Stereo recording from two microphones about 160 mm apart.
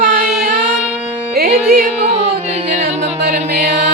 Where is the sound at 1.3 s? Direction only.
70° right (ahead or behind).